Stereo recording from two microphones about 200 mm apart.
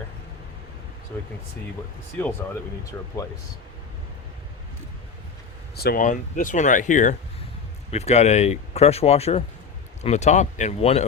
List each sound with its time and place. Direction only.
1.1 s speech: 10° left (ahead or behind)
5.7 s speech: 50° left (ahead or behind); by 11.0 s 30° left (ahead or behind)